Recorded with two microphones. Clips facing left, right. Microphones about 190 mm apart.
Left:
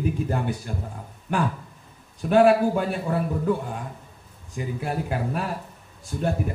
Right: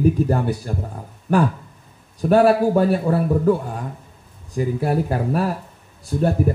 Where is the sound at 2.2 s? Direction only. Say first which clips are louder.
Right 2 dB; 40° right (ahead or behind).